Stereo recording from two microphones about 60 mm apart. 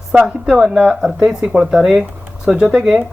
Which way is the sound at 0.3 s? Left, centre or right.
Centre.